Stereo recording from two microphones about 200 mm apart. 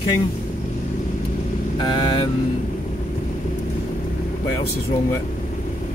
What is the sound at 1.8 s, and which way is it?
Vehicle, 25° left (ahead or behind).